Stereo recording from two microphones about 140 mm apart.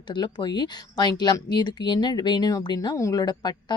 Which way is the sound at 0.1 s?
35° left (ahead or behind).